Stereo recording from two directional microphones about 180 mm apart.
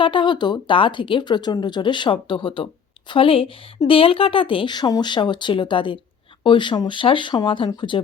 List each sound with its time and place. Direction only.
0.0 s speech: 25° left (ahead or behind)